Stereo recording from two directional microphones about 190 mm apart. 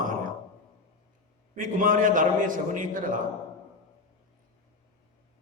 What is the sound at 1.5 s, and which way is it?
A man's voice, 45° right (ahead or behind).